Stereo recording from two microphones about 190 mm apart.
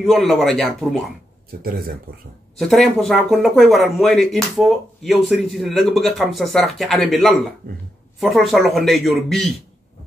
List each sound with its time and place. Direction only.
0.0 s speech: centre (ahead or behind)
1.6 s speech: 50° right (ahead or behind)
2.6 s speech: centre (ahead or behind)